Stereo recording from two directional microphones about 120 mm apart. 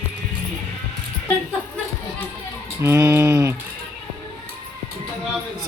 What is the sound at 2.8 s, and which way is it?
Speech, 20° right (ahead or behind).